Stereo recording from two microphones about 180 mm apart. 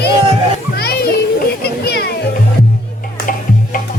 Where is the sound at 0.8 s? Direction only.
60° left (ahead or behind).